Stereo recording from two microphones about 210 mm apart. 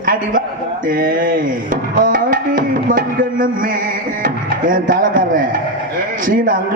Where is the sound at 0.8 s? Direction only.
40° right (ahead or behind).